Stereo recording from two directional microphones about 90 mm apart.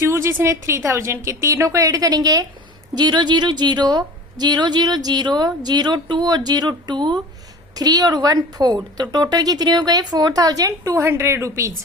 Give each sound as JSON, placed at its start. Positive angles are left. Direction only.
{"t": 0.0, "sound": "a woman's voice", "side_deg": -30}
{"t": 7.8, "sound": "a woman's voice", "side_deg": -45}